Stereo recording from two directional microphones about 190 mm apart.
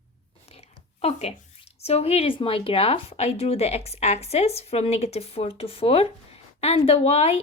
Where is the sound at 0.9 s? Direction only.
35° left (ahead or behind).